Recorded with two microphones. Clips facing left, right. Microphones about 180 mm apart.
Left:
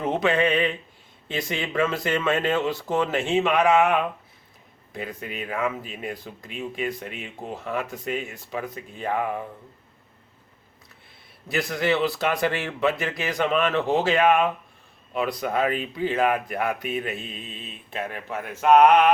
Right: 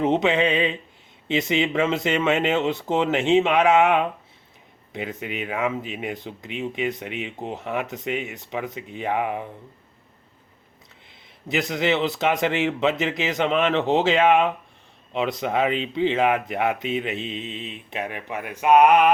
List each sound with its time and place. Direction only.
0.0 s speech: 20° right (ahead or behind)
11.1 s speech: 20° right (ahead or behind)